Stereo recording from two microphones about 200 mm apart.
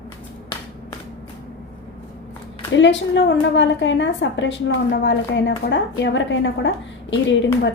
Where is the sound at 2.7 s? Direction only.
65° left (ahead or behind).